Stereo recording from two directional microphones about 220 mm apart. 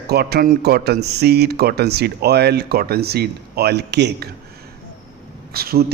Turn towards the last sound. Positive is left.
turn(degrees=-45)  # may be behind; listen again after turning